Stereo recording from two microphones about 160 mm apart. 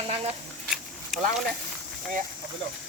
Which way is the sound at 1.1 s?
Centre (ahead or behind).